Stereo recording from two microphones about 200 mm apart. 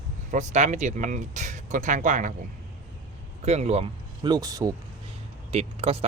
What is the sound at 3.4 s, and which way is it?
Speech, 30° right (ahead or behind).